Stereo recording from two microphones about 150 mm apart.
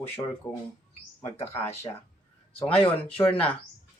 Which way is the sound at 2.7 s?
40° left (ahead or behind).